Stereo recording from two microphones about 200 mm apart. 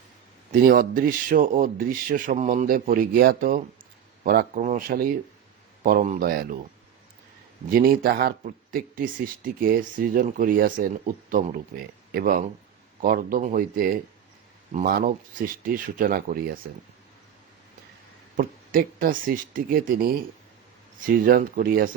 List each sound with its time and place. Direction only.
0.5 s speech: 45° right (ahead or behind)
7.7 s speech: 45° right (ahead or behind)
18.3 s speech: 45° right (ahead or behind)